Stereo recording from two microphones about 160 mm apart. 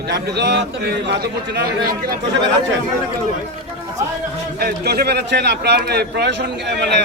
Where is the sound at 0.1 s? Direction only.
90° right.